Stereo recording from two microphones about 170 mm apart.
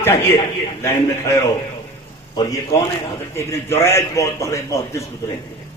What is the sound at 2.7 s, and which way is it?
A man's voice, 20° left (ahead or behind).